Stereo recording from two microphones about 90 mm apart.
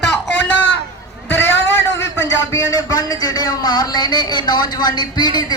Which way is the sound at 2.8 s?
45° left (ahead or behind).